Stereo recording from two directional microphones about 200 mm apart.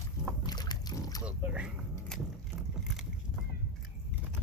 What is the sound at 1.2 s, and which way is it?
Dog, 5° right (ahead or behind).